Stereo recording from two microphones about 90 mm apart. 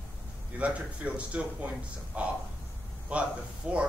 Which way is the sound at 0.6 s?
15° right (ahead or behind).